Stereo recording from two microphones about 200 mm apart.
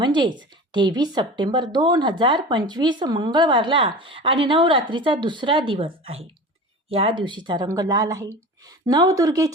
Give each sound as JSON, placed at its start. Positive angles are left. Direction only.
{"t": 0.0, "sound": "speech", "side_deg": -25}